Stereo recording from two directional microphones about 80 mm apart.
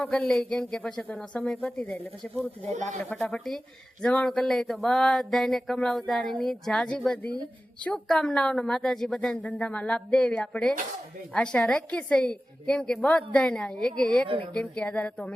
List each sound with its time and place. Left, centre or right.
0.2 s a woman's voice: centre
3.0 s a woman's voice: centre
3.2 s a sound: centre
4.0 s a woman's voice: centre
4.4 s a sound: centre
8.0 s a woman's voice: centre
14.3 s a woman's voice: right
14.5 s a woman's voice: centre